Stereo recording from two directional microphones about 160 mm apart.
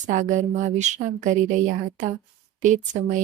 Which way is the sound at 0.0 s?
50° right (ahead or behind).